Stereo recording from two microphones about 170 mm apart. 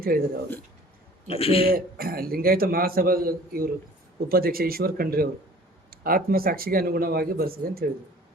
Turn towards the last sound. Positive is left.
turn(degrees=-60)  # may be behind; listen again after turning